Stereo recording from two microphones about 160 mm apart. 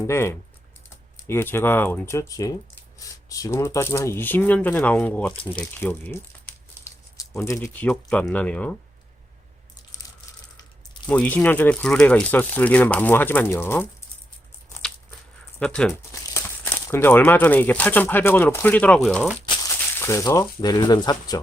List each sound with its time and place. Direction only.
0.0 s speech: 15° left (ahead or behind)
11.0 s speech: 10° left (ahead or behind)
15.5 s speech: 5° left (ahead or behind)
19.6 s speech: 20° left (ahead or behind)